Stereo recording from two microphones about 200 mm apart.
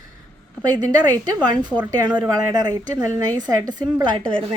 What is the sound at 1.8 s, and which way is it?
Speech, 20° right (ahead or behind).